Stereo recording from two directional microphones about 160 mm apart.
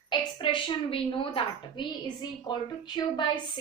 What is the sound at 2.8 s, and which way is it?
Speech, 30° left (ahead or behind).